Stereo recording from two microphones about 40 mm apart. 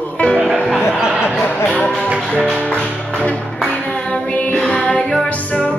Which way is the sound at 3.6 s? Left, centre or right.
Left.